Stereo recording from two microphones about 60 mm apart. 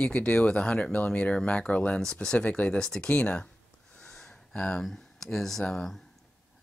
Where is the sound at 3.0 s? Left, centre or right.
Left.